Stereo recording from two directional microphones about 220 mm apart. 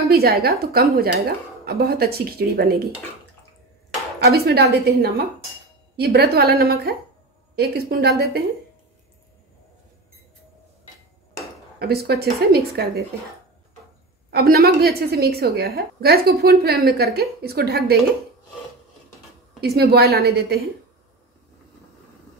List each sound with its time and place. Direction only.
0.1 s a woman's voice: 45° right (ahead or behind)
4.2 s a woman's voice: 45° right (ahead or behind)
11.8 s a woman's voice: 45° right (ahead or behind)
14.3 s a woman's voice: 45° right (ahead or behind)
19.6 s a woman's voice: 45° right (ahead or behind)